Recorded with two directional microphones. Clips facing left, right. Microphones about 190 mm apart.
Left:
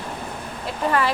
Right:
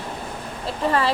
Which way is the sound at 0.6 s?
30° right (ahead or behind).